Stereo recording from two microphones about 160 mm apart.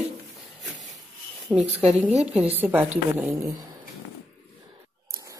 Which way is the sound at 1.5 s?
10° right (ahead or behind).